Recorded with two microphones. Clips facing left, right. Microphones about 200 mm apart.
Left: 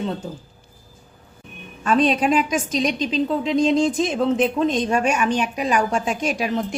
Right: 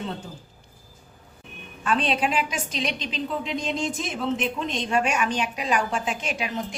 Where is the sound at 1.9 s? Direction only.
45° left (ahead or behind).